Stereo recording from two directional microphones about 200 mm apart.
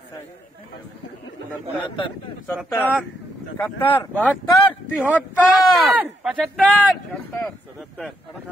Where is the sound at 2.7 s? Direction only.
10° left (ahead or behind).